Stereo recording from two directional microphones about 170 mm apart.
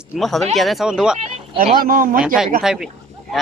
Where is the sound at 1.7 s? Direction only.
55° right (ahead or behind).